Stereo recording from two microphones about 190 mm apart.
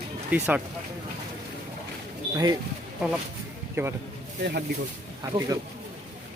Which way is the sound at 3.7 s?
10° right (ahead or behind).